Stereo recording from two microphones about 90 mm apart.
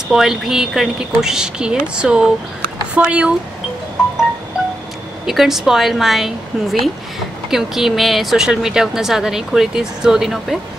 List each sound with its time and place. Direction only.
0.1 s speech: 5° right (ahead or behind)
5.2 s a woman's voice: 5° right (ahead or behind)